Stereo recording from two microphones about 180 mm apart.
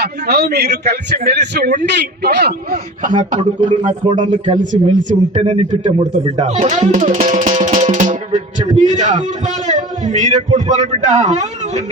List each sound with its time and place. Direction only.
0.0 s a man's voice: 65° right (ahead or behind); by 6.7 s 40° right (ahead or behind)
6.9 s music: 45° right (ahead or behind)
8.9 s a man's voice: 40° right (ahead or behind)